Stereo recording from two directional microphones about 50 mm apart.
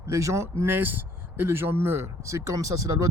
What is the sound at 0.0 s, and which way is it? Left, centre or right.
Speech, right.